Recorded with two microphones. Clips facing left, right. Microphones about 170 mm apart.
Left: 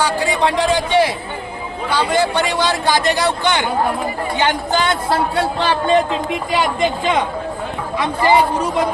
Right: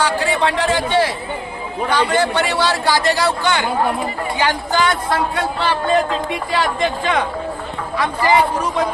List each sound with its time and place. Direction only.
0.0 s a man's voice: 15° left (ahead or behind); by 5.9 s 30° left (ahead or behind)
6.5 s a man's voice: 20° left (ahead or behind)